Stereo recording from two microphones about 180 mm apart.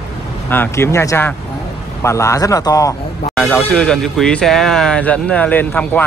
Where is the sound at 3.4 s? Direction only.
5° left (ahead or behind).